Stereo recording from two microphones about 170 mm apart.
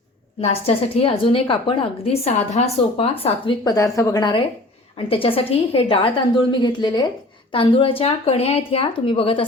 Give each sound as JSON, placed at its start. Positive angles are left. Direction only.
{"t": 0.4, "sound": "a woman's voice", "side_deg": 35}
{"t": 3.6, "sound": "a woman's voice", "side_deg": 20}